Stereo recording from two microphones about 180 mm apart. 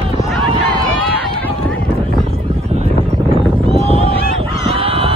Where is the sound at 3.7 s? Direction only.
35° right (ahead or behind).